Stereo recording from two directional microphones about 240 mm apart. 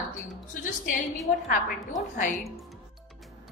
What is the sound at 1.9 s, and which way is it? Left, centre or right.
Speech, left.